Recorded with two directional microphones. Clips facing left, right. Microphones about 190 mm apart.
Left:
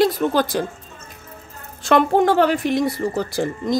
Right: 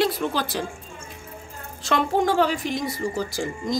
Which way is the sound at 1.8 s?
55° left (ahead or behind).